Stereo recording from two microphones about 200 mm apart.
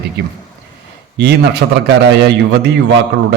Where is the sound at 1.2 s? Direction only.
55° right (ahead or behind).